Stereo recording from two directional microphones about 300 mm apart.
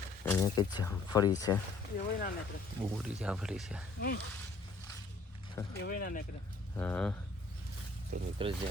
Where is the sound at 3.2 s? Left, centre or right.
Centre.